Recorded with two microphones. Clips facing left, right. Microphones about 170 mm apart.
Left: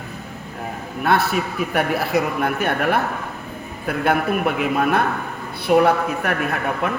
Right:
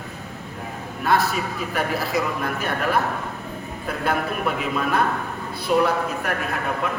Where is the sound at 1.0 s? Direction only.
60° left (ahead or behind).